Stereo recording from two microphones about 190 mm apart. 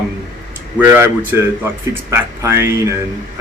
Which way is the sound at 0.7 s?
10° right (ahead or behind).